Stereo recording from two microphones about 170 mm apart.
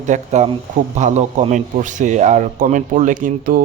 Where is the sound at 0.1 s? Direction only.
40° right (ahead or behind).